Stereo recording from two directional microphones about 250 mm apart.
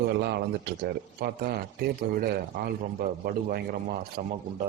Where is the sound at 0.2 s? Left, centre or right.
Right.